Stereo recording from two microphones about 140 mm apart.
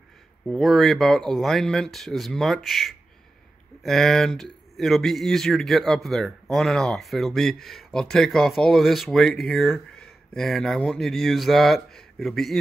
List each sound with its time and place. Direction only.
0.5 s speech: centre (ahead or behind)